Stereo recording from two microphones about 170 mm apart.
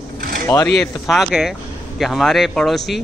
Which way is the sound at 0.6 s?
5° left (ahead or behind).